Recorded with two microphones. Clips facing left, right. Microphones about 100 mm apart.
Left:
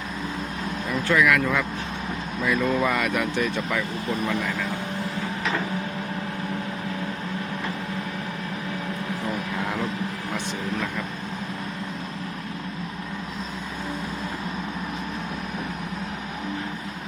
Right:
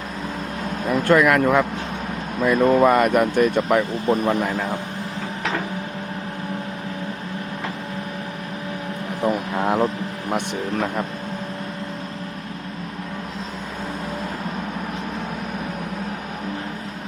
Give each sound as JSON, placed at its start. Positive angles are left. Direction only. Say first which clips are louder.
{"t": 0.9, "sound": "speech", "louder": "right 5 dB", "side_deg": -50}
{"t": 9.2, "sound": "vehicle", "louder": "right 10 dB", "side_deg": -50}